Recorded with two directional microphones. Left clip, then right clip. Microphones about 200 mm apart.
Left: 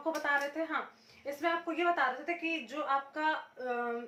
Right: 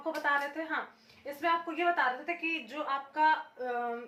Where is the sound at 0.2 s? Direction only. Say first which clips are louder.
Right 3 dB; 15° left (ahead or behind).